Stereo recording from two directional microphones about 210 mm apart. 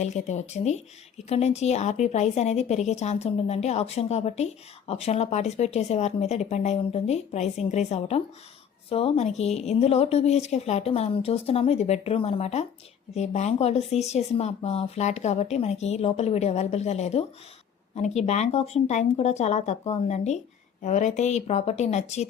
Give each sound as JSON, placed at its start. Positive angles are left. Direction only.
{"t": 0.0, "sound": "a woman's voice", "side_deg": 35}